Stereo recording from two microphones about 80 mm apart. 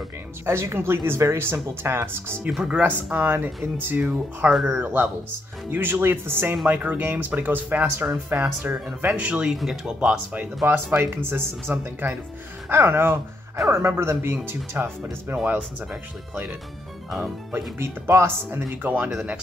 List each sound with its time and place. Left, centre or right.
0.5 s speech: right
2.5 s speech: centre
2.8 s speech: right
4.5 s speech: centre
4.7 s speech: right
6.5 s speech: centre
9.9 s speech: centre
17.7 s speech: right
19.0 s speech: centre